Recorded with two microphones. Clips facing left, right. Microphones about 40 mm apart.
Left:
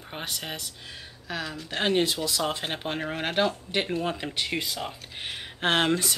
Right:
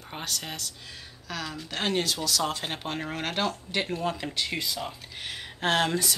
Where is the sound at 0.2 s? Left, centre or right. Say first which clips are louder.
Even; centre.